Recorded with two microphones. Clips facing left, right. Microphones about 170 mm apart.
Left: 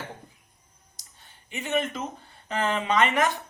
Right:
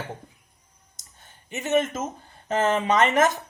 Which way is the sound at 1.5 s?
45° right (ahead or behind).